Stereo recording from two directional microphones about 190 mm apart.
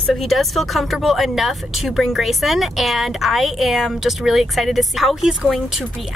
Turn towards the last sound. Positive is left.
turn(degrees=0)  # may be behind; listen again after turning